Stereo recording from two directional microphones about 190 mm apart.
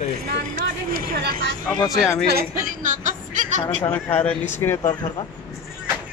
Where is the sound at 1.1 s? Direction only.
55° right (ahead or behind).